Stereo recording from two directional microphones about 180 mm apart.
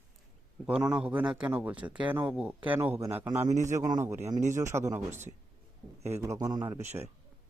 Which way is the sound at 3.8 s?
15° right (ahead or behind).